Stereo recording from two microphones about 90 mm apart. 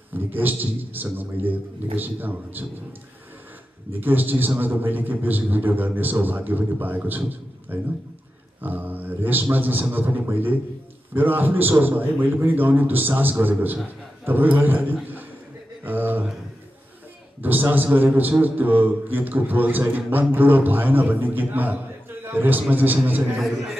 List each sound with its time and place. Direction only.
0.1 s a man's voice: 20° right (ahead or behind)
4.0 s a man's voice: 20° right (ahead or behind)
15.8 s a sound: 20° right (ahead or behind)
17.4 s a man's voice: 20° right (ahead or behind)
23.3 s a man's voice: 5° right (ahead or behind)